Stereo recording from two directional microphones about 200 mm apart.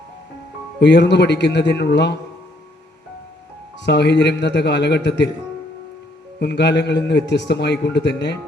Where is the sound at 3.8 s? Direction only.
60° left (ahead or behind).